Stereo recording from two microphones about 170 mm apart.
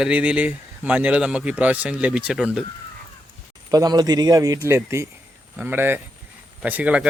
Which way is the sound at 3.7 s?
20° right (ahead or behind).